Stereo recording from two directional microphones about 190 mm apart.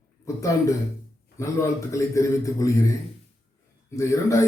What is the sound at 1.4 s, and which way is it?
Speech, 15° left (ahead or behind).